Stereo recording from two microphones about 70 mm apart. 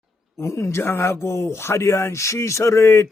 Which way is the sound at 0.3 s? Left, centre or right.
Left.